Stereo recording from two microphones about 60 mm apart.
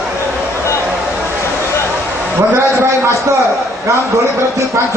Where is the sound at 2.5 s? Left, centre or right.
Right.